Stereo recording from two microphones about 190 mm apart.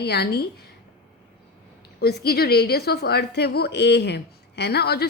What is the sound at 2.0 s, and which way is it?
A woman's voice, 55° left (ahead or behind).